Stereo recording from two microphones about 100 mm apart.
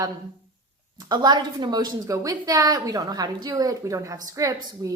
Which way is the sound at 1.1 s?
45° right (ahead or behind).